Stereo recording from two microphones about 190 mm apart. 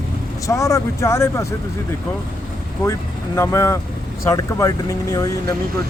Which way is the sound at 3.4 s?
15° left (ahead or behind).